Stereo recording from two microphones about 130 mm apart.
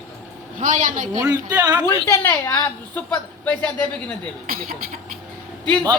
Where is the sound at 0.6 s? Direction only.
90° right.